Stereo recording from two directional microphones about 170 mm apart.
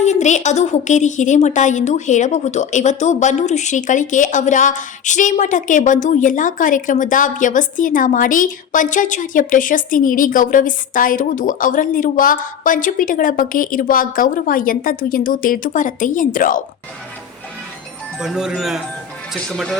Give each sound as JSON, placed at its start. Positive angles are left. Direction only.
{"t": 0.0, "sound": "a woman's voice", "side_deg": 45}
{"t": 18.2, "sound": "speech", "side_deg": -5}